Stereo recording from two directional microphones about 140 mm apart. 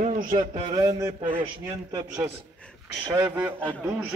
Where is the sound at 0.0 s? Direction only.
65° right (ahead or behind).